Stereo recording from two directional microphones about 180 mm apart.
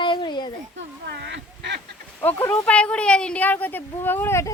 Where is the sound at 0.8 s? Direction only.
70° right (ahead or behind).